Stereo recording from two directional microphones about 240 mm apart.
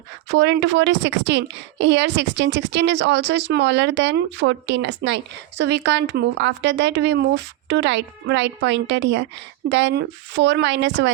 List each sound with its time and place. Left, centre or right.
0.3 s a woman's voice: right